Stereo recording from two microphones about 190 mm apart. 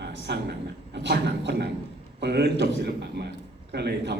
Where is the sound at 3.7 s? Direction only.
60° right (ahead or behind).